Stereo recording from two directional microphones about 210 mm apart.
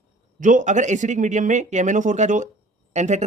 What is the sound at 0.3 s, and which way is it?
Speech, 40° right (ahead or behind).